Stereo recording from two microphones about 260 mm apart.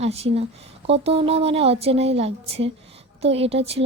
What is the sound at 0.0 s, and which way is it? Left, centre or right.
Speech, right.